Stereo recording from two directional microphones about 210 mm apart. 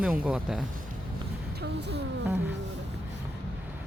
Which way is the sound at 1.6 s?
50° right (ahead or behind).